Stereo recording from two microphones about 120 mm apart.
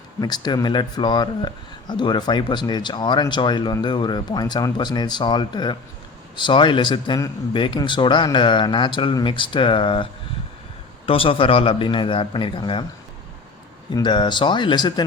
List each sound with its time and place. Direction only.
0.2 s a man's voice: 35° left (ahead or behind)
13.9 s speech: 40° left (ahead or behind)